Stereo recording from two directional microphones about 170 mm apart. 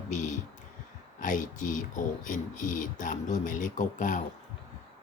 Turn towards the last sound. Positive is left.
turn(degrees=50)  # may be behind; listen again after turning